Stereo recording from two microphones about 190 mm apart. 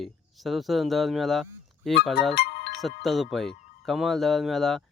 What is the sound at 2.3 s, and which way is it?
Music, 55° left (ahead or behind).